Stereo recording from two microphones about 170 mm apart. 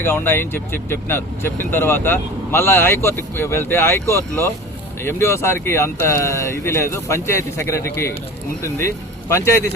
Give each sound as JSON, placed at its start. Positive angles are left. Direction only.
{"t": 0.0, "sound": "speech", "side_deg": 10}
{"t": 9.3, "sound": "speech", "side_deg": 15}